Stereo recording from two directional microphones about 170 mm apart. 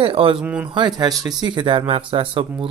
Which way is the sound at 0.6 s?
25° right (ahead or behind).